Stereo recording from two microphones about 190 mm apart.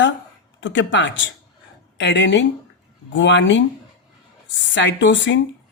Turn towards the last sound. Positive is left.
turn(degrees=70)  # may be behind; listen again after turning